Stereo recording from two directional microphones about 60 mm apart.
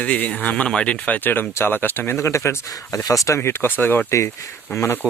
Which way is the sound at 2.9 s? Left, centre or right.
Left.